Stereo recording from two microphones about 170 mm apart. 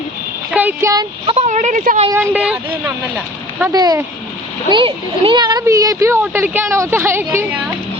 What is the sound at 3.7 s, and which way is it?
Speech, 25° right (ahead or behind).